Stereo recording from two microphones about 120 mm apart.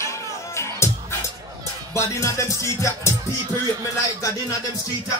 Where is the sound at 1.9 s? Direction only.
25° left (ahead or behind).